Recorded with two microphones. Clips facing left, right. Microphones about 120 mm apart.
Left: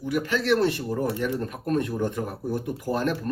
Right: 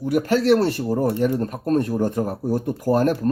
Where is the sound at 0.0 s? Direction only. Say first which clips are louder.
Right 7 dB; 45° right (ahead or behind).